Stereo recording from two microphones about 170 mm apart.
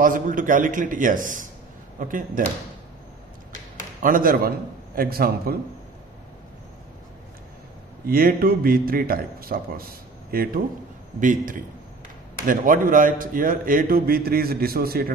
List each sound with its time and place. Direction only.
0.0 s a man's voice: 50° right (ahead or behind)
4.0 s a man's voice: 55° right (ahead or behind)
8.1 s a man's voice: 60° right (ahead or behind)
11.1 s a man's voice: 50° right (ahead or behind)